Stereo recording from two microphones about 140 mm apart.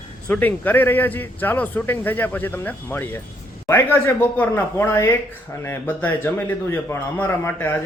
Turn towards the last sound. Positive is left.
turn(degrees=15)  # may be behind; listen again after turning